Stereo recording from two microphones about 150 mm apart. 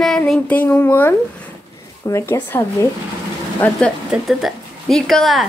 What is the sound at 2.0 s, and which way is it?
Speech, 20° left (ahead or behind).